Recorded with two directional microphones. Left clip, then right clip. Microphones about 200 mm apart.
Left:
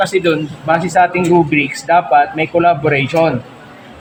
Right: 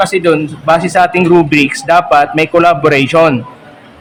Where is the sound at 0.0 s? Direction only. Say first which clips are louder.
Right 4 dB; 25° right (ahead or behind).